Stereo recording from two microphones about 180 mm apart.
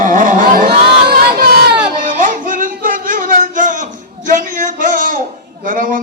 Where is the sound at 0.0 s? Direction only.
45° right (ahead or behind).